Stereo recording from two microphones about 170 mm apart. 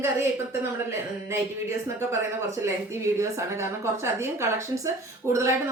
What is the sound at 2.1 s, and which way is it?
A woman's voice, 15° right (ahead or behind).